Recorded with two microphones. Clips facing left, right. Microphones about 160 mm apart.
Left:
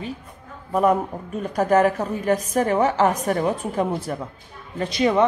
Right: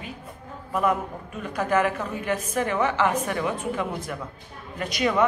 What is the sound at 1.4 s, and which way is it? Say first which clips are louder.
A woman's voice: left 5 dB; 40° left (ahead or behind).